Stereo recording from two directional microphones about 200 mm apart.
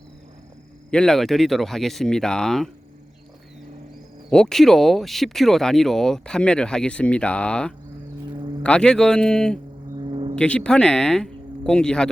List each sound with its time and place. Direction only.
0.9 s speech: 5° left (ahead or behind)
4.3 s speech: 5° left (ahead or behind)
10.0 s a sound: 25° right (ahead or behind)
10.3 s speech: 5° left (ahead or behind)